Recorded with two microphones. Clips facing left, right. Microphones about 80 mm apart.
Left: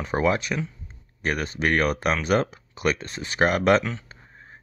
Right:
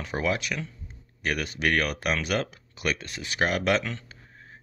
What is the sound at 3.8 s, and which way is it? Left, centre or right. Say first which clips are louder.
Speech: left 4 dB; centre.